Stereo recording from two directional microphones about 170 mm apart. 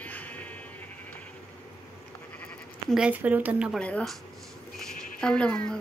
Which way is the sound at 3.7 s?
5° left (ahead or behind).